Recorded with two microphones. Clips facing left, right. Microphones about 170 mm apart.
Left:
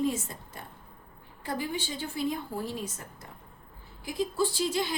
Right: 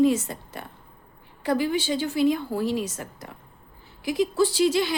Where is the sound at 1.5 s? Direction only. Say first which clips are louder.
Right 10 dB; 85° right.